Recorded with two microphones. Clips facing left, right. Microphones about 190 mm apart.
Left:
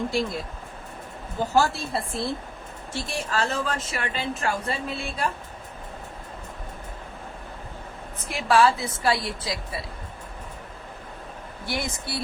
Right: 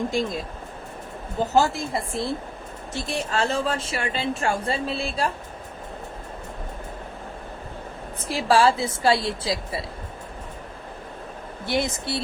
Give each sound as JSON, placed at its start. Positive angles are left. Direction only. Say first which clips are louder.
{"t": 0.1, "sound": "a woman's voice", "louder": "right 1 dB", "side_deg": -15}
{"t": 8.2, "sound": "a woman's voice", "louder": "right 1 dB", "side_deg": -30}
{"t": 11.6, "sound": "a woman's voice", "louder": "right 6 dB", "side_deg": -25}